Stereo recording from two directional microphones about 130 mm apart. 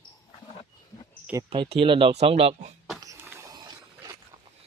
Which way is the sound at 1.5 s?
50° right (ahead or behind).